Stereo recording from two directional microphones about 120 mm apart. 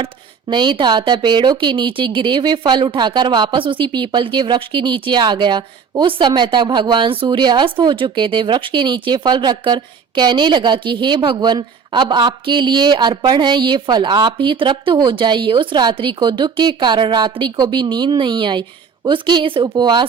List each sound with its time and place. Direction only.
0.0 s speech: 40° right (ahead or behind)